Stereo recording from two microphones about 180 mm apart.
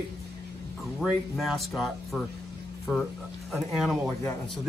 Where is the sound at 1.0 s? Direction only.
Centre (ahead or behind).